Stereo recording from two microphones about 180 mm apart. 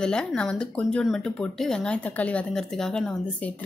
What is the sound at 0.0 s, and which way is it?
Speech, 5° left (ahead or behind).